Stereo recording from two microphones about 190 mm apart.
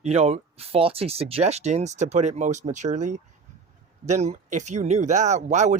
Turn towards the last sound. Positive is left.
turn(degrees=-40)  # may be behind; listen again after turning